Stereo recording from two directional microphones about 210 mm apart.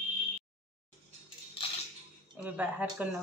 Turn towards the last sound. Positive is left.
turn(degrees=-5)  # may be behind; listen again after turning